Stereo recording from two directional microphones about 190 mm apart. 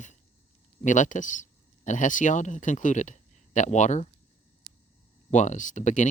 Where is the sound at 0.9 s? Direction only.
40° left (ahead or behind).